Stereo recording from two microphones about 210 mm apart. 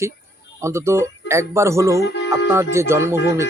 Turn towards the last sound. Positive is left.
turn(degrees=-10)  # may be behind; listen again after turning